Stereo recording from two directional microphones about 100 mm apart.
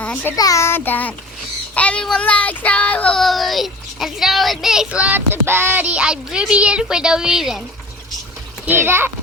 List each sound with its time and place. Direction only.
0.0 s a child's voice: 15° left (ahead or behind)
0.3 s child singing: 35° left (ahead or behind); by 3.2 s 15° left (ahead or behind)
3.2 s a child's voice: centre (ahead or behind)
8.6 s a child's voice: 20° right (ahead or behind)